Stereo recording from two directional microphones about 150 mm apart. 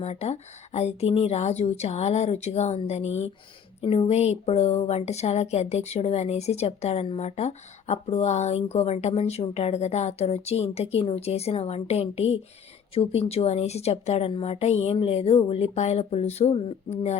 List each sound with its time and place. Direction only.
0.0 s speech: 45° left (ahead or behind)